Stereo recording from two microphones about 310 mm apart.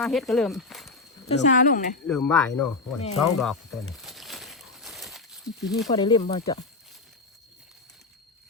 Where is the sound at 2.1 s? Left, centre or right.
Centre.